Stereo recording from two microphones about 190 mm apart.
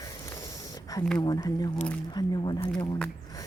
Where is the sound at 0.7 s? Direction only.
20° left (ahead or behind).